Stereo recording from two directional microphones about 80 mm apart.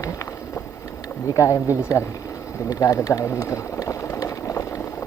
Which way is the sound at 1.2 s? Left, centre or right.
Left.